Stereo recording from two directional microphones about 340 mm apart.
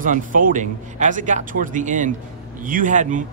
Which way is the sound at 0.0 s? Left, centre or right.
Right.